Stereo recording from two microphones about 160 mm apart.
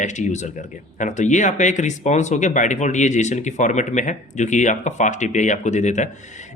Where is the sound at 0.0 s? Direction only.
50° left (ahead or behind).